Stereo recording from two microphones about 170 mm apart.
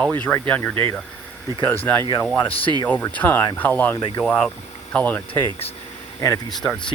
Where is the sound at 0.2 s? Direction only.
10° left (ahead or behind).